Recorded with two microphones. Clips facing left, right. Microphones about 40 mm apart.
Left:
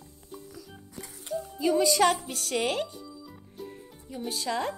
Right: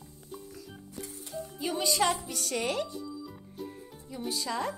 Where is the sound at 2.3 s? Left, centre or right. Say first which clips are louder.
Left 3 dB; left.